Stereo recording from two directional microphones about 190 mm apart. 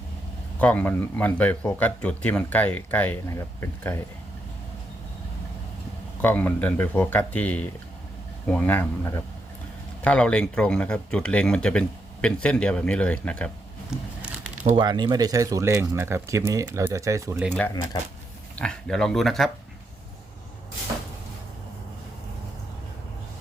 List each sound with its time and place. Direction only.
0.6 s speech: 10° left (ahead or behind)
6.2 s speech: 10° left (ahead or behind)
13.9 s a sound: 5° right (ahead or behind)
14.8 s speech: 25° right (ahead or behind)
18.5 s speech: 5° left (ahead or behind)